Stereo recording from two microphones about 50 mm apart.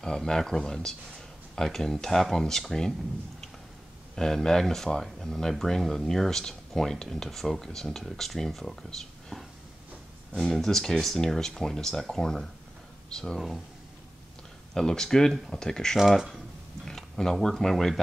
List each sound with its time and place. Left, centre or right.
0.0 s speech: centre
4.1 s speech: centre
10.4 s speech: centre
14.7 s speech: centre
16.0 s speech: centre
16.8 s speech: centre